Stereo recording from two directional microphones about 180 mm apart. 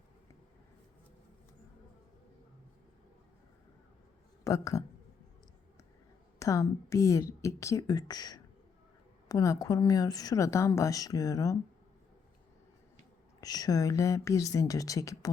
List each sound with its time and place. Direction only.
4.4 s a woman's voice: 15° left (ahead or behind)
6.4 s a woman's voice: 15° left (ahead or behind)
13.4 s a woman's voice: 20° left (ahead or behind)